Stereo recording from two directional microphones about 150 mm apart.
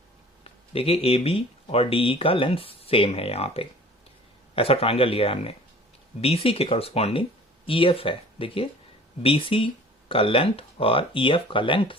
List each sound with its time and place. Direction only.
0.7 s speech: 40° left (ahead or behind)